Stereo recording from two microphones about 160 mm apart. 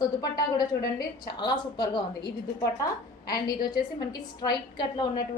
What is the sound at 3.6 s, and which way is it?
A woman's voice, 25° left (ahead or behind).